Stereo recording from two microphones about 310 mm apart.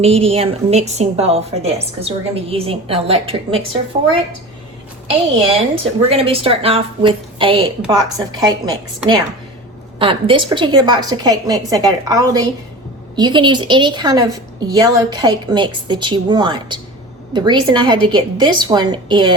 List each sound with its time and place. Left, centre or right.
0.0 s a woman's voice: centre
5.7 s a woman's voice: centre